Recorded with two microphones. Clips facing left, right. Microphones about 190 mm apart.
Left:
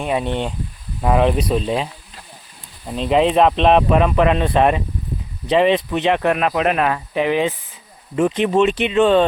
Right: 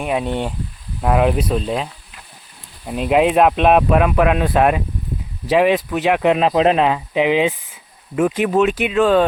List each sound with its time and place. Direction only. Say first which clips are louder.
0.0 s speech: even; 5° right (ahead or behind)
6.2 s speech: right 3 dB; 20° right (ahead or behind)
8.1 s speech: even; 5° right (ahead or behind)